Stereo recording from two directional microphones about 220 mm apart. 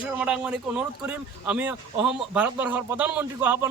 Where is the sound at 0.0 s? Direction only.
5° right (ahead or behind).